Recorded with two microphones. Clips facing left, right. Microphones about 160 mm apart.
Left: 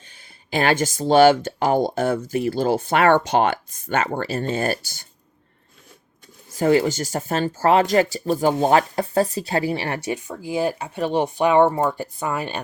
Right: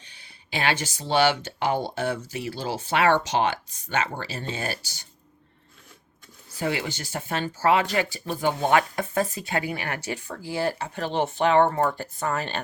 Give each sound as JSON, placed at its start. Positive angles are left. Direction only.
{"t": 0.0, "sound": "speech", "side_deg": 45}
{"t": 6.5, "sound": "speech", "side_deg": 45}